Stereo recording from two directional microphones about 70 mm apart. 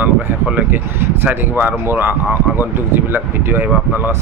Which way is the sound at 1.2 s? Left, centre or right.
Right.